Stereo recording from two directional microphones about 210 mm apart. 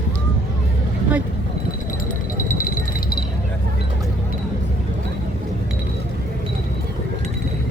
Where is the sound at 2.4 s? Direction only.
40° left (ahead or behind).